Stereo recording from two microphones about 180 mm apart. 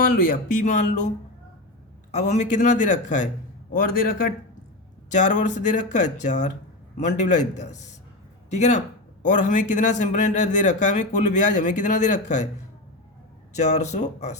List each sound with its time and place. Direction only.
0.0 s a man's voice: 50° left (ahead or behind)
2.1 s a man's voice: 40° left (ahead or behind)
13.6 s a man's voice: 40° left (ahead or behind)